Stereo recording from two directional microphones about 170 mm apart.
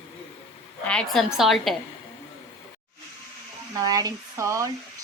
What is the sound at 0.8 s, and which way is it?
Speech, 5° left (ahead or behind).